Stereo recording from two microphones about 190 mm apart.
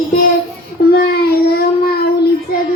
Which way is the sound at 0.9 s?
55° left (ahead or behind).